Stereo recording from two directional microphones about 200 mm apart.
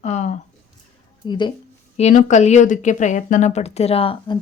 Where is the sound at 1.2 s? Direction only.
20° left (ahead or behind).